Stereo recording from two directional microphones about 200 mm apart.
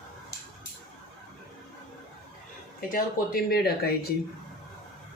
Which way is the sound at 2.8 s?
45° left (ahead or behind).